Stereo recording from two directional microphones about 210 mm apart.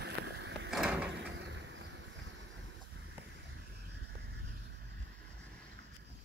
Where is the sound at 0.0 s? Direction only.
55° right (ahead or behind).